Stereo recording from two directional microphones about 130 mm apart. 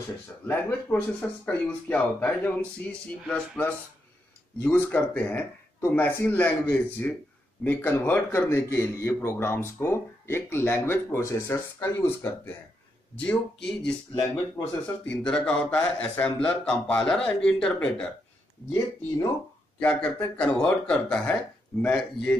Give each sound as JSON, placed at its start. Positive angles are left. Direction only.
{"t": 0.5, "sound": "a man's voice", "side_deg": 10}
{"t": 13.1, "sound": "a man's voice", "side_deg": 10}
{"t": 19.8, "sound": "a man's voice", "side_deg": 10}